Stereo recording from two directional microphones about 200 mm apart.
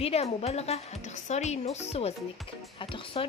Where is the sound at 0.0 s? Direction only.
30° left (ahead or behind).